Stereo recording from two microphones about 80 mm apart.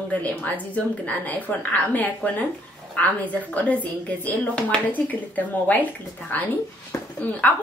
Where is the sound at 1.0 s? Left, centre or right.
Centre.